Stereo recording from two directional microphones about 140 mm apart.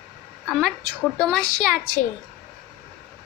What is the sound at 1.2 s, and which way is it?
Speech, 5° left (ahead or behind).